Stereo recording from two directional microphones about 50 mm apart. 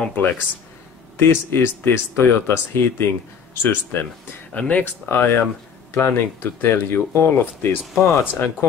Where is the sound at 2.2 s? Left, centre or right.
Left.